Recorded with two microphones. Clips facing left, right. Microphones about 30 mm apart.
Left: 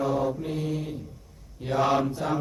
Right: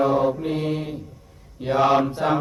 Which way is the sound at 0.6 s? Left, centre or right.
Right.